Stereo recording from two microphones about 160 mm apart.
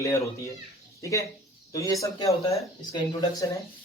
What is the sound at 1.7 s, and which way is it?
Speech, 20° left (ahead or behind).